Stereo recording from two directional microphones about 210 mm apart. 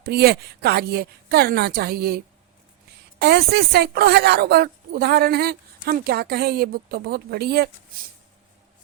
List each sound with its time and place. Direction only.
0.0 s a woman's voice: 50° right (ahead or behind)